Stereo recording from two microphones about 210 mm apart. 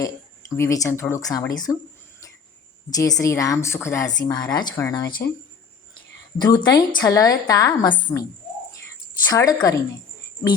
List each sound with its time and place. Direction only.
0.0 s speech: 15° left (ahead or behind)
2.9 s speech: 15° left (ahead or behind)
6.4 s speech: 20° left (ahead or behind)
9.3 s speech: 15° left (ahead or behind)